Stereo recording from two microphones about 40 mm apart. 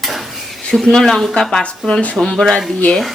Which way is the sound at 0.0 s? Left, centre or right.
Centre.